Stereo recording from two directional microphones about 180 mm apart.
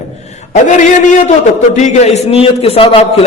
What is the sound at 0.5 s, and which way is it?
A man's voice, 45° left (ahead or behind).